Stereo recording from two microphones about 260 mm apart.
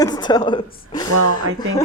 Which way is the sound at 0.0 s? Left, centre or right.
Centre.